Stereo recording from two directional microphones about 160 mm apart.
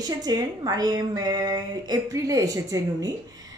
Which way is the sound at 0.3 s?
25° right (ahead or behind).